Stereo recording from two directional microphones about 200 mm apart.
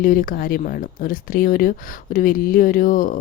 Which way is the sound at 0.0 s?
45° left (ahead or behind).